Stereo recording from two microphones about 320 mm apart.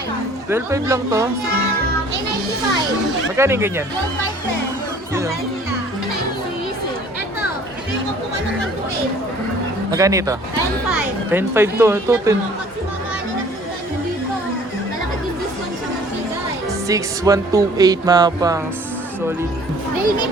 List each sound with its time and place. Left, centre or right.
0.5 s speech: centre
3.3 s speech: centre
9.9 s speech: centre
16.9 s speech: centre